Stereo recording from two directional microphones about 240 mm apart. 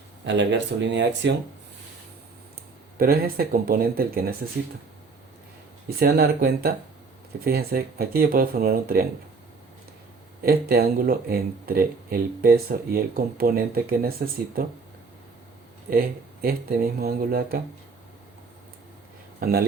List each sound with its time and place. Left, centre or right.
0.3 s speech: right
3.0 s speech: right
6.0 s speech: right
10.4 s speech: right
15.9 s speech: right
19.4 s speech: right